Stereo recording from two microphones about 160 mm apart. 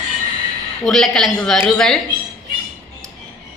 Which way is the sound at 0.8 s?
5° left (ahead or behind).